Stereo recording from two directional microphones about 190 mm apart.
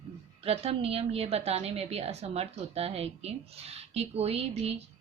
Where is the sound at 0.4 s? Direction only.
30° right (ahead or behind).